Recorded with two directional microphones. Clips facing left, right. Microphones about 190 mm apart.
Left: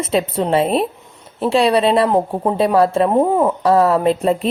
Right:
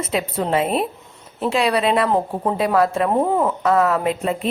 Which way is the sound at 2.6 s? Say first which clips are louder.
Left 4 dB; 30° left (ahead or behind).